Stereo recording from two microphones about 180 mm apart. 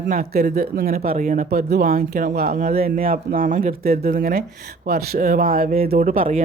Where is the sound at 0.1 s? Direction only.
45° right (ahead or behind).